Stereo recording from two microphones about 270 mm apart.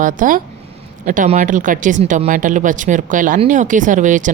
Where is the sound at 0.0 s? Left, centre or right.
Right.